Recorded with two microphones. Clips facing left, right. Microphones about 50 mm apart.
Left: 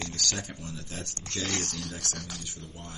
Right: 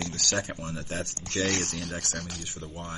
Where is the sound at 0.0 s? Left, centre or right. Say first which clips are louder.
Right 4 dB; right.